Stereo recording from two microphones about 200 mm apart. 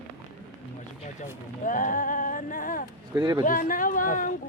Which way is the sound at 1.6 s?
40° left (ahead or behind).